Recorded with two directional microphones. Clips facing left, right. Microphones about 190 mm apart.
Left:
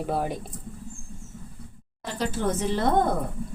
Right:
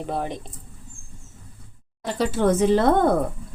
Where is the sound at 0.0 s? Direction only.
5° left (ahead or behind).